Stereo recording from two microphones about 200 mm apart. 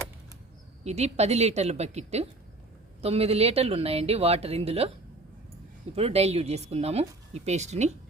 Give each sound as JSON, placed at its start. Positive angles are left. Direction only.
{"t": 0.9, "sound": "speech", "side_deg": -30}
{"t": 6.0, "sound": "speech", "side_deg": -30}